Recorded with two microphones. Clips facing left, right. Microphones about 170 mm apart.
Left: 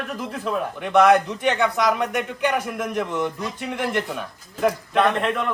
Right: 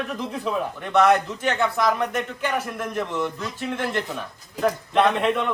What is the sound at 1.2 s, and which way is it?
Speech, 15° left (ahead or behind).